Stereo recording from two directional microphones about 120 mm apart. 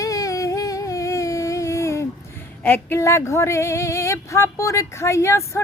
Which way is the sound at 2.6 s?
20° left (ahead or behind).